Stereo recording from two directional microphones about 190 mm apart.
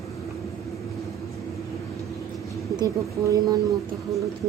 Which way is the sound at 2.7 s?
20° right (ahead or behind).